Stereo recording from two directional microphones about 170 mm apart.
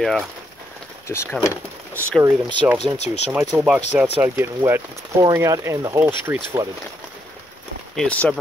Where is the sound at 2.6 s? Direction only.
15° right (ahead or behind).